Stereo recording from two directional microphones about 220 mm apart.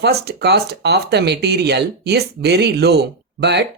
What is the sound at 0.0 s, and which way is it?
Speech, 50° right (ahead or behind).